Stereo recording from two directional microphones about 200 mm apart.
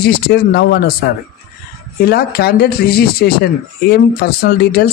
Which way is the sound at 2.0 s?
50° left (ahead or behind).